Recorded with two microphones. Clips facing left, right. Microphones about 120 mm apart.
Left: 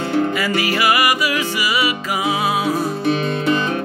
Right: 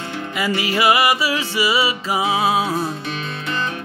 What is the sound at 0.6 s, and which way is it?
Music, 25° right (ahead or behind).